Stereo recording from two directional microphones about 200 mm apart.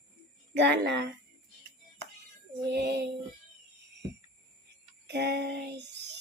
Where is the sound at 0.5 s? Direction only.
60° right (ahead or behind).